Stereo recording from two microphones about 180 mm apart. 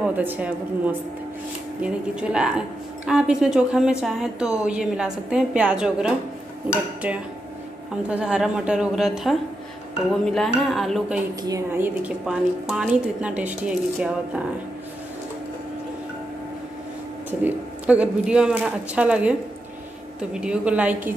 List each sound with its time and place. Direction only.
0.1 s a woman's voice: 10° right (ahead or behind)
8.1 s a woman's voice: 5° right (ahead or behind)
11.4 s a woman's voice: 15° right (ahead or behind)
17.3 s a woman's voice: 10° right (ahead or behind)